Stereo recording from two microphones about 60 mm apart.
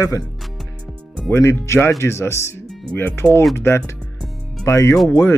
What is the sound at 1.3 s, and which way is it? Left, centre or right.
Speech, left.